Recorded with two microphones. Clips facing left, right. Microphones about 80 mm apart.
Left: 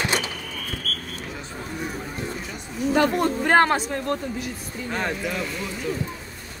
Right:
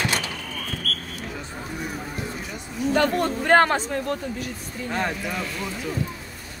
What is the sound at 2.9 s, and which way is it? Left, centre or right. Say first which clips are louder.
Speech: left 1 dB; centre.